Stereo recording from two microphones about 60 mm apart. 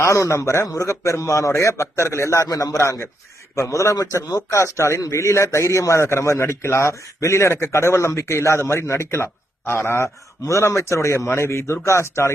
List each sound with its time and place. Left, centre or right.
0.0 s a man's voice: left
10.4 s a man's voice: left